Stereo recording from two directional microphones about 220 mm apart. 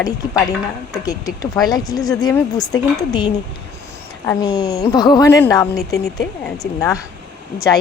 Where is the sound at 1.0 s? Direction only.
15° left (ahead or behind).